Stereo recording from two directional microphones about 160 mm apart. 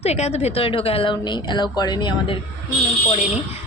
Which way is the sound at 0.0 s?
40° left (ahead or behind).